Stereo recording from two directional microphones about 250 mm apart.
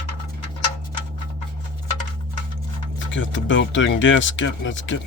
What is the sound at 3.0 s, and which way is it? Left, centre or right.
Speech, left.